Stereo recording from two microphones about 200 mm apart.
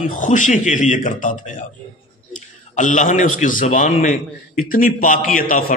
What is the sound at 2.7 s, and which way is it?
A man's voice, 40° left (ahead or behind).